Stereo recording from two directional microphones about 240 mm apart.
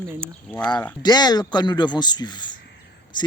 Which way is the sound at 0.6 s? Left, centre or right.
Centre.